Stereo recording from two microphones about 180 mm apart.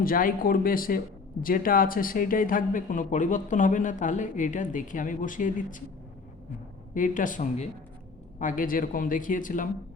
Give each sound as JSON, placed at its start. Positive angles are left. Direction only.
{"t": 0.0, "sound": "speech", "side_deg": 50}
{"t": 6.9, "sound": "speech", "side_deg": 45}